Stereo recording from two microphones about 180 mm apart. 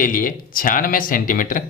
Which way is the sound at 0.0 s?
50° left (ahead or behind).